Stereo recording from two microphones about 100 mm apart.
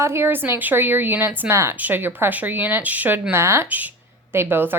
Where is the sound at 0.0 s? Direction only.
25° right (ahead or behind).